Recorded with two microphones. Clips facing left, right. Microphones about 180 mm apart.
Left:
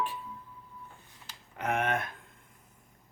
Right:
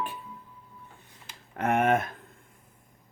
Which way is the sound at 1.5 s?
50° right (ahead or behind).